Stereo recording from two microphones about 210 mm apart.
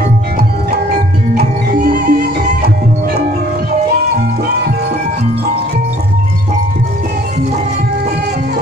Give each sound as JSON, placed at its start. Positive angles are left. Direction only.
{"t": 1.3, "sound": "music", "side_deg": -45}